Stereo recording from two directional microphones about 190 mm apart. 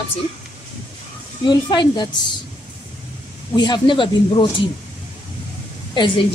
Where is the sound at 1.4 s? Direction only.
25° left (ahead or behind).